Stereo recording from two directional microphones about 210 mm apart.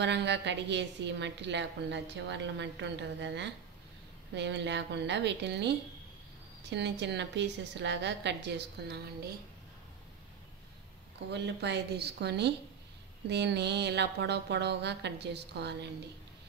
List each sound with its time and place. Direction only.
0.0 s a woman's voice: 55° right (ahead or behind)
11.3 s a woman's voice: 55° right (ahead or behind)